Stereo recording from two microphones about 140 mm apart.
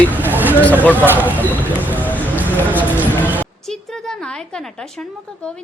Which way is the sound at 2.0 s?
10° left (ahead or behind).